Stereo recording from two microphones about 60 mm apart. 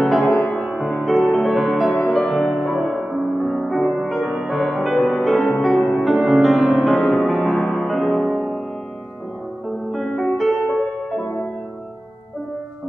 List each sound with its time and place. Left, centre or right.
0.0 s music: centre
2.6 s music: centre
3.3 s music: centre
10.0 s music: centre